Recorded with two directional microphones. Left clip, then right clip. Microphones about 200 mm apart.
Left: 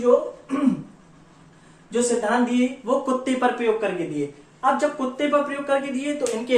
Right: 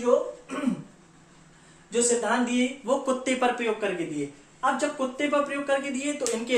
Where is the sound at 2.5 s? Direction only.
25° right (ahead or behind).